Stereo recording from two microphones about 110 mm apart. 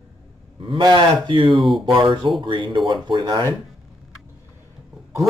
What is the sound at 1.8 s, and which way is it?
Speech, 45° right (ahead or behind).